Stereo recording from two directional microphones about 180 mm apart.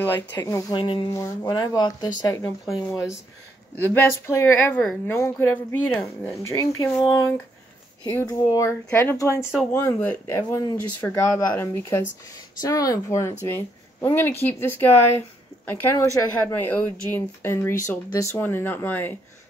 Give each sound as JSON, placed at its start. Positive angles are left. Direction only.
{"t": 0.0, "sound": "speech", "side_deg": 15}
{"t": 2.6, "sound": "speech", "side_deg": 0}
{"t": 3.7, "sound": "speech", "side_deg": 15}
{"t": 6.6, "sound": "speech", "side_deg": 20}